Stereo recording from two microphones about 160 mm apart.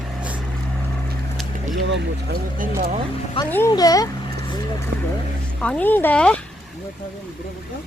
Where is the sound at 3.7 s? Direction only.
25° left (ahead or behind).